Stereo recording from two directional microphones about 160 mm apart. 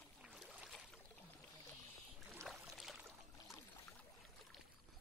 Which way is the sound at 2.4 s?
Centre (ahead or behind).